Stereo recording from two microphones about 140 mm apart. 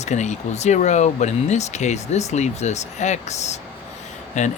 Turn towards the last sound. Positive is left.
turn(degrees=55)  # may be behind; listen again after turning